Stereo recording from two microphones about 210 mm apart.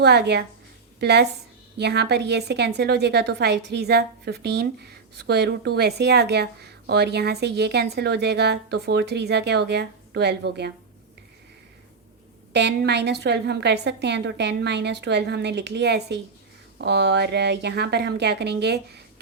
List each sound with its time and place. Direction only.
0.0 s a woman's voice: 50° right (ahead or behind)
12.5 s a woman's voice: 55° right (ahead or behind)